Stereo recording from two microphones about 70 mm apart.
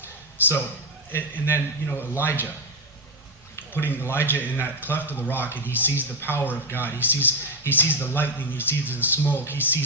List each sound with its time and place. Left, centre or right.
0.0 s a sound: left
1.1 s speech: left
3.5 s speech: left